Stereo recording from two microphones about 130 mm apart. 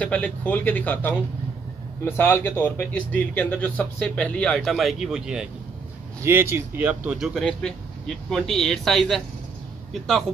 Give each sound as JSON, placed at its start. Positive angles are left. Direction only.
{"t": 0.0, "sound": "speech", "side_deg": 10}
{"t": 6.2, "sound": "speech", "side_deg": -20}
{"t": 7.1, "sound": "speech", "side_deg": 0}